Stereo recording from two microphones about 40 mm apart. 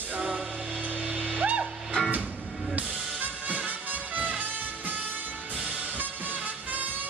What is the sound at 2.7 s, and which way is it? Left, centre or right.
Music, right.